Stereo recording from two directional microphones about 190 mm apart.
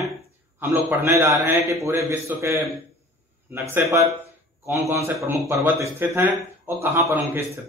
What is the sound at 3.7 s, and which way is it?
A man's voice, 15° right (ahead or behind).